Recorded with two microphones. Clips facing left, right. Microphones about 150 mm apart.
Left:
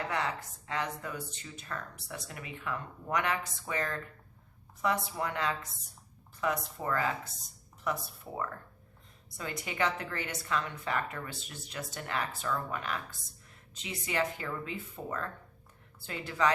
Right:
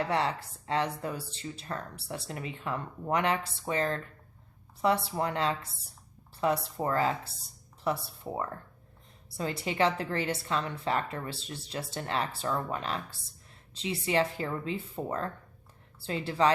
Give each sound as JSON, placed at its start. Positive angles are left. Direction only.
{"t": 0.1, "sound": "a woman's voice", "side_deg": -30}